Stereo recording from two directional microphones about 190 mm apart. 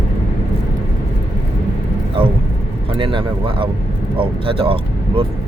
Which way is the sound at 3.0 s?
25° right (ahead or behind).